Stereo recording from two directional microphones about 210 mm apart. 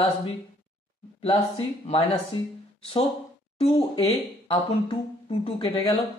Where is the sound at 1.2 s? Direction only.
30° left (ahead or behind).